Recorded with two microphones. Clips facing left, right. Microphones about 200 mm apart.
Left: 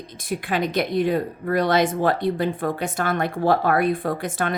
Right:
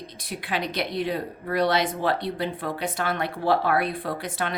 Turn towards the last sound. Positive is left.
turn(degrees=50)  # may be behind; listen again after turning